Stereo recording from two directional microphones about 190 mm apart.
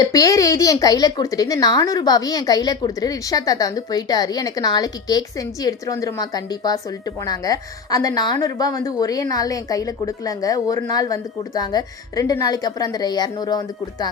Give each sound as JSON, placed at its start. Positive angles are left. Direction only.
{"t": 0.0, "sound": "speech", "side_deg": 20}